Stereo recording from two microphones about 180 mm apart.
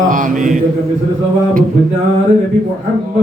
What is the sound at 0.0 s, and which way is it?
Mantra, 45° right (ahead or behind).